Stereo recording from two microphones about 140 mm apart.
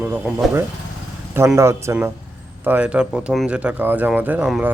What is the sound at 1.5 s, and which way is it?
Speech, 20° right (ahead or behind).